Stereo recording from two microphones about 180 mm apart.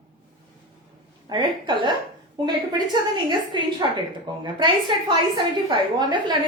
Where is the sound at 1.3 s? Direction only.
25° right (ahead or behind).